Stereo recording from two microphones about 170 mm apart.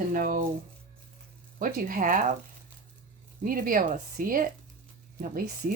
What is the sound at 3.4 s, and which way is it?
Speech, 55° right (ahead or behind).